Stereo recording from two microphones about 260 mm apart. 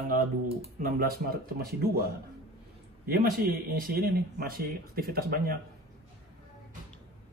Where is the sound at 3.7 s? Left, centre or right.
Right.